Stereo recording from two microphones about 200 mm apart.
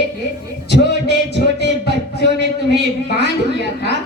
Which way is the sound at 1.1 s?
55° left (ahead or behind).